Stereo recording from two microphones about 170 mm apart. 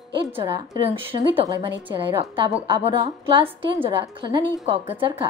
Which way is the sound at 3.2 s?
30° right (ahead or behind).